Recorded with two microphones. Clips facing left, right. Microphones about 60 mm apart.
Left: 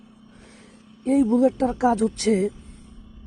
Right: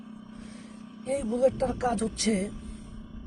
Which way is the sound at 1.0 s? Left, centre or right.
Left.